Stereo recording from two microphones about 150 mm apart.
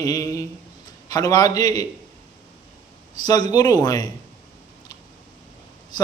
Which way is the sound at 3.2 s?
25° left (ahead or behind).